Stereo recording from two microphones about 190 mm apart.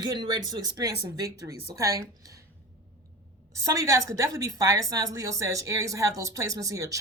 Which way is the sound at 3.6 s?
15° right (ahead or behind).